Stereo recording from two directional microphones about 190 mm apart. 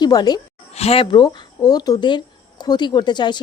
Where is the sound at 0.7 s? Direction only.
35° left (ahead or behind).